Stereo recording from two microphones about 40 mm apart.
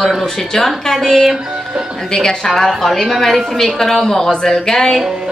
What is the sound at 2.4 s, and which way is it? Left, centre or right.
A woman's voice, centre.